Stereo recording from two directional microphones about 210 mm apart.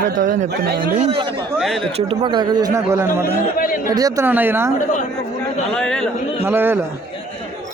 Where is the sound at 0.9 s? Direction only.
30° right (ahead or behind).